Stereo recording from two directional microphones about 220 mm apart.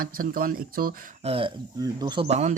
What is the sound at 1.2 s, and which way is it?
Speech, 25° right (ahead or behind).